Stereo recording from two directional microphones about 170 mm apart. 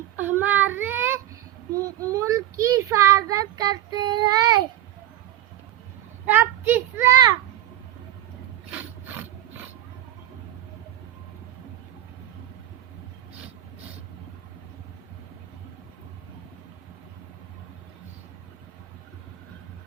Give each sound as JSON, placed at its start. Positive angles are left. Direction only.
{"t": 0.2, "sound": "child singing", "side_deg": -10}
{"t": 6.2, "sound": "a sound", "side_deg": -10}
{"t": 8.7, "sound": "ratchet", "side_deg": -10}